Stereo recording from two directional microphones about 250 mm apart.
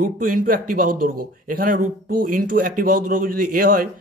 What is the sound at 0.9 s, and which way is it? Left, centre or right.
Speech, right.